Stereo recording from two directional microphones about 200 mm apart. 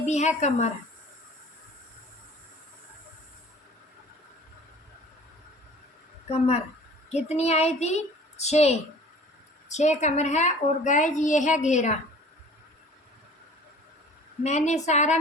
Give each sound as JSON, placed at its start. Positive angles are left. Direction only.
{"t": 0.0, "sound": "a woman's voice", "side_deg": 35}
{"t": 7.1, "sound": "a woman's voice", "side_deg": 30}
{"t": 14.4, "sound": "a woman's voice", "side_deg": 35}